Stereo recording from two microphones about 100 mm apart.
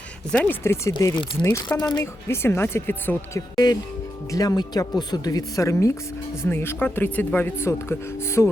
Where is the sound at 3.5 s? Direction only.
40° left (ahead or behind).